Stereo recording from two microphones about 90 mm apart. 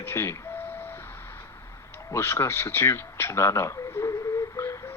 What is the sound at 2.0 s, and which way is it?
A man's voice, 30° left (ahead or behind).